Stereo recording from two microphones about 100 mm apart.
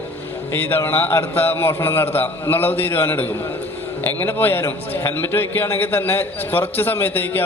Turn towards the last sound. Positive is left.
turn(degrees=20)  # may be behind; listen again after turning